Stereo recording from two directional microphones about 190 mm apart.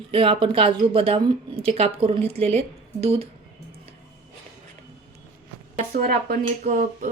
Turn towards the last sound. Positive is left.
turn(degrees=-45)  # may be behind; listen again after turning